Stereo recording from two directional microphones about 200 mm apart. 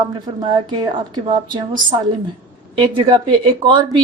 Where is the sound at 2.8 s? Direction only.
25° right (ahead or behind).